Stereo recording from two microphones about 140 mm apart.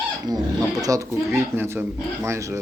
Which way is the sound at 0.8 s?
25° right (ahead or behind).